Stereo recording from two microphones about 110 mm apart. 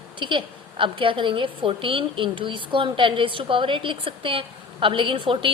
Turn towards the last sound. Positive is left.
turn(degrees=-50)  # may be behind; listen again after turning